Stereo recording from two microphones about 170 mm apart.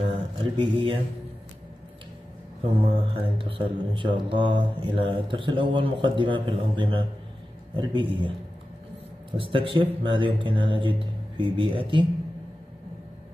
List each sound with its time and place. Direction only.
0.4 s mantra: 30° right (ahead or behind)
2.7 s speech: 35° right (ahead or behind)
9.4 s speech: 30° right (ahead or behind)